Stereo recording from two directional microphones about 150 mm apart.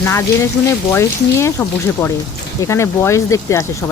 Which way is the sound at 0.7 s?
20° left (ahead or behind).